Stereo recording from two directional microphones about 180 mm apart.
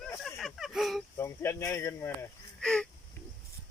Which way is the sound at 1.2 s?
15° left (ahead or behind).